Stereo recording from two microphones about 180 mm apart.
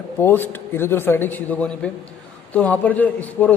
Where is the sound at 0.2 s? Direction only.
10° left (ahead or behind).